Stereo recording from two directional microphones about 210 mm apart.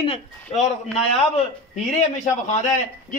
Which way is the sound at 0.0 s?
30° left (ahead or behind).